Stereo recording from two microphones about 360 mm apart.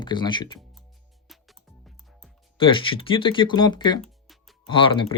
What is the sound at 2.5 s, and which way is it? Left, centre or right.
Speech, centre.